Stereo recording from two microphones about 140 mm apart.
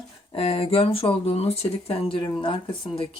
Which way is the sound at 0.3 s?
45° left (ahead or behind).